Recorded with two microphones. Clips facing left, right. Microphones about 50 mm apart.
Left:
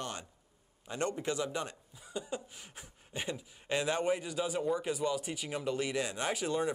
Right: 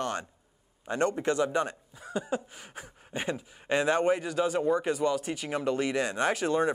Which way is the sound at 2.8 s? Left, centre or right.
Right.